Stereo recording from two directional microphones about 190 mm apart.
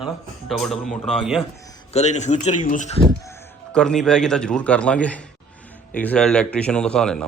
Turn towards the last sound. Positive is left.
turn(degrees=5)  # may be behind; listen again after turning